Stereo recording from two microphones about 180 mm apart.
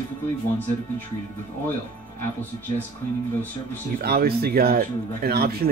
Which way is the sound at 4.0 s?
60° right (ahead or behind).